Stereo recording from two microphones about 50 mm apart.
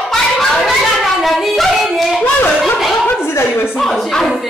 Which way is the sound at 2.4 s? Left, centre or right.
Left.